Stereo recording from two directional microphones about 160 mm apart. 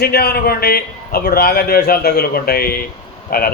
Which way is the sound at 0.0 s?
80° left.